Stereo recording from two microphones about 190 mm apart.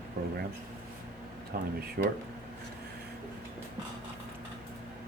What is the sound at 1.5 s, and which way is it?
Speech, 50° right (ahead or behind).